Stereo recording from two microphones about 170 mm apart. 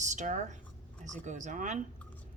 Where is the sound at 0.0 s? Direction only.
45° right (ahead or behind).